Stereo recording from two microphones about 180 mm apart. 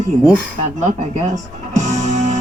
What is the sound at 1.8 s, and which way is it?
Music, 40° right (ahead or behind).